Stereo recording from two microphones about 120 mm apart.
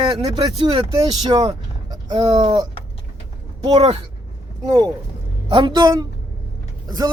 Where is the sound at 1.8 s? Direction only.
40° right (ahead or behind).